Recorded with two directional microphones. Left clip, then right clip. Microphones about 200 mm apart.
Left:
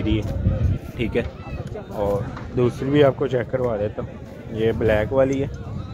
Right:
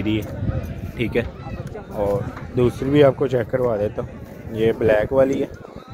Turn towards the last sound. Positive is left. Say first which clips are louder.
# right 2 dB
turn(degrees=-15)  # may be behind; listen again after turning